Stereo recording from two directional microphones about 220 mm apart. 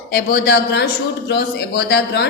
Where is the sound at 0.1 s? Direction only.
50° left (ahead or behind).